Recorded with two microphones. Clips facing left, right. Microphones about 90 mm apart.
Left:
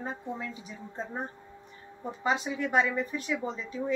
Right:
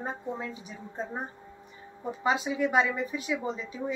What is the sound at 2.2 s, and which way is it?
Speech, 5° right (ahead or behind).